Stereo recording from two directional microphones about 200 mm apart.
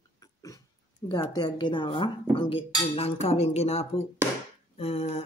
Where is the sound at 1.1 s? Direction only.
20° left (ahead or behind).